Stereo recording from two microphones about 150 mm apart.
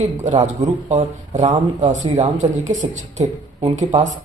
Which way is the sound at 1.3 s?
35° right (ahead or behind).